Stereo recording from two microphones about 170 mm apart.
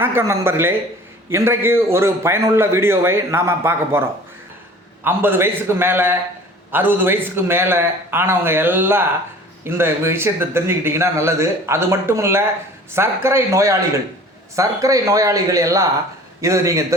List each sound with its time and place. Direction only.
0.0 s a man's voice: 15° right (ahead or behind)